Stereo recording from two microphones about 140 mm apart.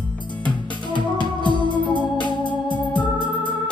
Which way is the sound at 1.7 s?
35° left (ahead or behind).